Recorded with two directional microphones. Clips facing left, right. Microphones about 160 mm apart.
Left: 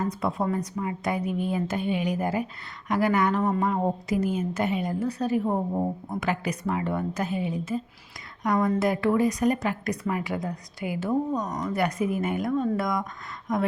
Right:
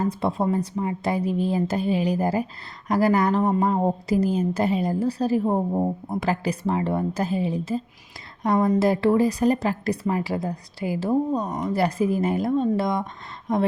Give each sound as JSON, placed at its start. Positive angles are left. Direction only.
{"t": 0.0, "sound": "a woman's voice", "side_deg": -30}